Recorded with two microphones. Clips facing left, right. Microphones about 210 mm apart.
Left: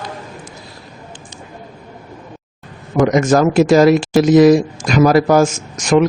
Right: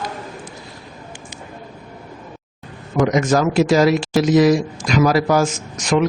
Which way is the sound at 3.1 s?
50° left (ahead or behind).